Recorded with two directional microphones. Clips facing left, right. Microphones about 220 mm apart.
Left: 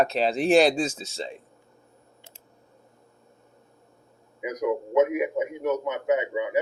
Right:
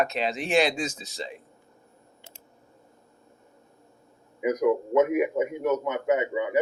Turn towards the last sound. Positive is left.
turn(degrees=-50)  # may be behind; listen again after turning